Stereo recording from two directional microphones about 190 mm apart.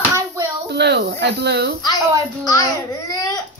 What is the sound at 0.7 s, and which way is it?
Speech, 60° right (ahead or behind).